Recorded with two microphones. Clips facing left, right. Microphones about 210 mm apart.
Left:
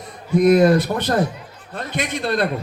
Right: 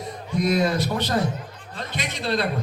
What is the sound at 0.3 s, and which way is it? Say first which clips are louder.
A man's voice: left 8 dB; 50° left (ahead or behind).